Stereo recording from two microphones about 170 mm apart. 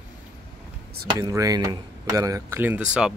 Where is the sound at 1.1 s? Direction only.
20° right (ahead or behind).